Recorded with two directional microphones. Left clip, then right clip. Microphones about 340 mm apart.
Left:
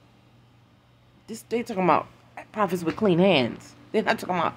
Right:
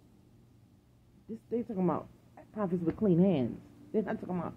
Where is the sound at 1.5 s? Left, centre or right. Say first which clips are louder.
Left 11 dB; centre.